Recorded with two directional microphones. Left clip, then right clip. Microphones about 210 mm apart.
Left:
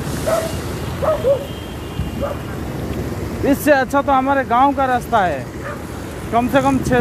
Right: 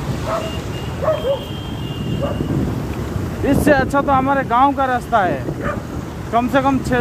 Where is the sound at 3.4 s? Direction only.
5° right (ahead or behind).